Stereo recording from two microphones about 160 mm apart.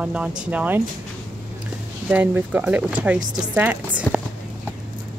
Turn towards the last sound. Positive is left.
turn(degrees=-10)  # may be behind; listen again after turning